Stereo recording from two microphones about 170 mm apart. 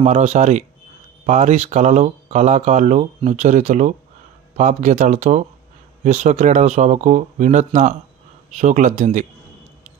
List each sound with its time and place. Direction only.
0.0 s speech: 40° right (ahead or behind)